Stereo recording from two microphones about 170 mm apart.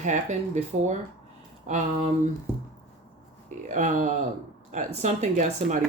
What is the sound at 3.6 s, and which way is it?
Speech, 45° right (ahead or behind).